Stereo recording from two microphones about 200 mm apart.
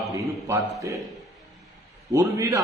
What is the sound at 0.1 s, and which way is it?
Speech, 15° right (ahead or behind).